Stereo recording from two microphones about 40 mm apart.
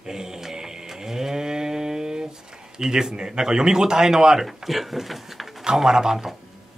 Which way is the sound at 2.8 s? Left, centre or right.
Centre.